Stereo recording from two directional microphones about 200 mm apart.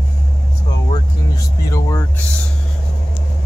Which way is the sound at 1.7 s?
15° left (ahead or behind).